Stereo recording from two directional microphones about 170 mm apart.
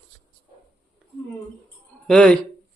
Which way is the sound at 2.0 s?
5° left (ahead or behind).